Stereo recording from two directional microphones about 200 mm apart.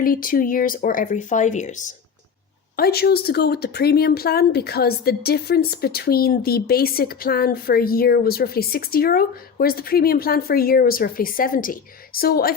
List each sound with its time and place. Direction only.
0.0 s speech: 45° left (ahead or behind)
2.7 s speech: 50° left (ahead or behind)